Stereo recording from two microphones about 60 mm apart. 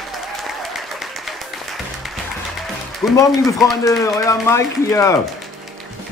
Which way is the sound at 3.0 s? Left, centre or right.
Left.